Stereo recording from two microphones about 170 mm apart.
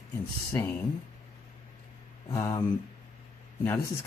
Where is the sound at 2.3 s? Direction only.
15° left (ahead or behind).